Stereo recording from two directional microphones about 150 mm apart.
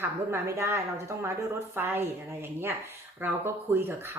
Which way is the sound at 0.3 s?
15° right (ahead or behind).